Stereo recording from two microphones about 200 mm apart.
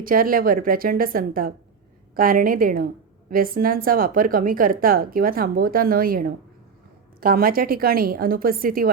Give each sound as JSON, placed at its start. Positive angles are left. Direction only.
{"t": 0.0, "sound": "a woman's voice", "side_deg": -45}